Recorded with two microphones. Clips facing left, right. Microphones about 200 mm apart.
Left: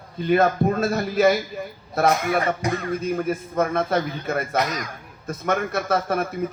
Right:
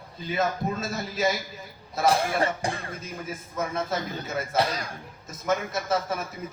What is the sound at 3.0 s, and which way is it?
Speech, 60° left (ahead or behind).